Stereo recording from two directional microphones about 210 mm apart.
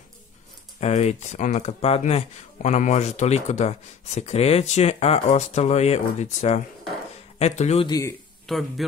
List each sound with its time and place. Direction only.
0.7 s speech: 30° left (ahead or behind)
7.9 s speech: 15° left (ahead or behind)
8.5 s speech: centre (ahead or behind)